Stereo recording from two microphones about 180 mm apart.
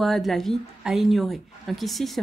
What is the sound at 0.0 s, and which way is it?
A woman's voice, centre (ahead or behind).